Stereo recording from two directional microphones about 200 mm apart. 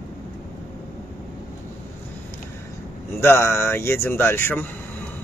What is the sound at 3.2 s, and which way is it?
Speech, 15° left (ahead or behind).